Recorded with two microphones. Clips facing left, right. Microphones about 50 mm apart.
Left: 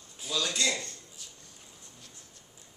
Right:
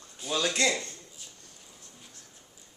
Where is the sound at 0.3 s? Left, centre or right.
Right.